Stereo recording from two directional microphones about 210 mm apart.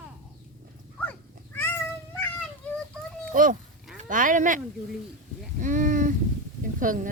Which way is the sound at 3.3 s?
40° right (ahead or behind).